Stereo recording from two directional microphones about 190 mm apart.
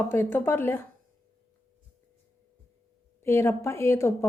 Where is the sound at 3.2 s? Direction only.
15° left (ahead or behind).